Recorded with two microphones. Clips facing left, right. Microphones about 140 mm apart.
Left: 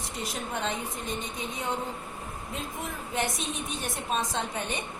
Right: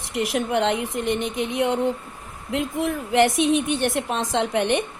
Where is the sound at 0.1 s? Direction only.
85° right.